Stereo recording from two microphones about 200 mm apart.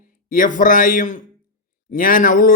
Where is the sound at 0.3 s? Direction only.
40° left (ahead or behind).